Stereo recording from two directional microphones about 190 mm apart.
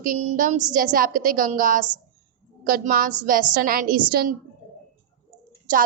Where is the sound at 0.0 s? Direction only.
40° right (ahead or behind).